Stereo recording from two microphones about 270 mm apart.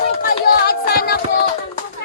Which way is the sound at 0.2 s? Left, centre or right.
Left.